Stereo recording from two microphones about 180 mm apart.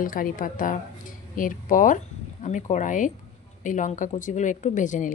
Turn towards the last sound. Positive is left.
turn(degrees=45)  # may be behind; listen again after turning